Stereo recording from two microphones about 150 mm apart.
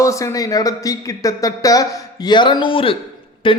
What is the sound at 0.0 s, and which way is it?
A man's voice, 20° left (ahead or behind).